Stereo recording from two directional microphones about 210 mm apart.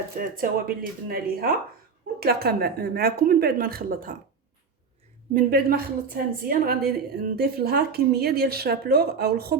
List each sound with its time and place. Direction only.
0.2 s speech: 40° right (ahead or behind)
5.3 s speech: 45° right (ahead or behind)